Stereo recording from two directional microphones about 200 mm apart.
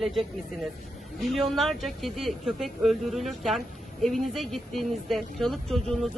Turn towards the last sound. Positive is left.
turn(degrees=0)  # may be behind; listen again after turning